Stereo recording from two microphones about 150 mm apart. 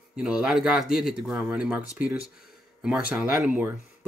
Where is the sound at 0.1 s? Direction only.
5° right (ahead or behind).